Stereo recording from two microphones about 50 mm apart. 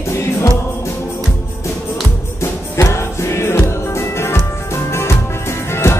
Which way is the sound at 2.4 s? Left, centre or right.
Left.